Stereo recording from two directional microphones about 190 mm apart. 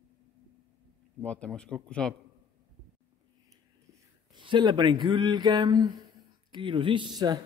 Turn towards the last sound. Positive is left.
turn(degrees=-20)  # may be behind; listen again after turning